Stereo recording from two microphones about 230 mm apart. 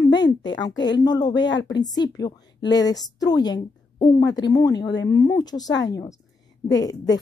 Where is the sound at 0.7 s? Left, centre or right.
Centre.